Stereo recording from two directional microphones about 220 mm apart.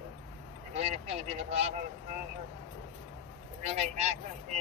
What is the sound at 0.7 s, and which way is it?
Speech, 30° right (ahead or behind).